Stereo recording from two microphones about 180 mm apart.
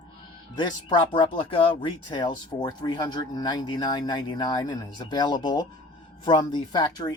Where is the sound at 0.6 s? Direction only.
25° left (ahead or behind).